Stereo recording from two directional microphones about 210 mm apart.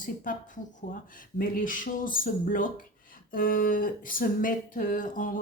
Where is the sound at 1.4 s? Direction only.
40° left (ahead or behind).